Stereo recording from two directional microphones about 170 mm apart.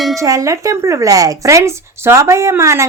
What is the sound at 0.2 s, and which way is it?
A woman's voice, 20° right (ahead or behind).